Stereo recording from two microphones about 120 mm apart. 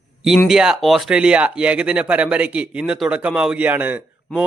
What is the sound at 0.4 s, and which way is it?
Speech, 5° right (ahead or behind).